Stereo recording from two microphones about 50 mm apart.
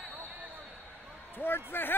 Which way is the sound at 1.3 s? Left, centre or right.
Left.